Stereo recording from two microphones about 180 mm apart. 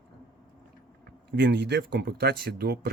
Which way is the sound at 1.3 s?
70° right (ahead or behind).